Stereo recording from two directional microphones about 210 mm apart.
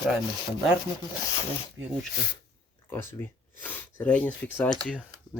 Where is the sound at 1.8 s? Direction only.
60° right (ahead or behind).